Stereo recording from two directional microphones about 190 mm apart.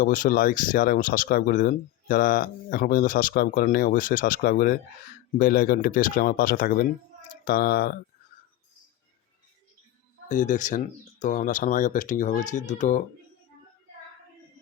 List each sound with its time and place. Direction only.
0.0 s speech: 45° left (ahead or behind)
10.2 s speech: 40° left (ahead or behind)